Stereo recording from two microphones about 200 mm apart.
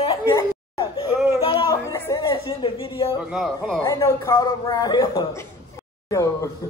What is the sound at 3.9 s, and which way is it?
A man's voice, 15° left (ahead or behind).